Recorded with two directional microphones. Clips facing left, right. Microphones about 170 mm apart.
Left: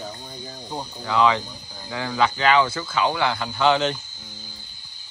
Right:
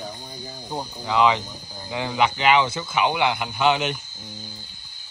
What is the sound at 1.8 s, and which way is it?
Speech, 20° right (ahead or behind).